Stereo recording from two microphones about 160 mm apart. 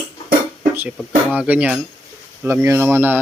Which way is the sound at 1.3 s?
10° right (ahead or behind).